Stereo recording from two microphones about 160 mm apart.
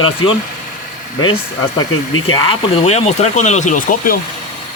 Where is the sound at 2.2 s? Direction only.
30° left (ahead or behind); by 4.2 s 60° left (ahead or behind).